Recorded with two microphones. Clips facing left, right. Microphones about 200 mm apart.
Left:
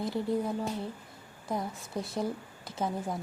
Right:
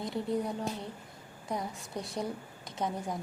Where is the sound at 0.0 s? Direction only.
Centre (ahead or behind).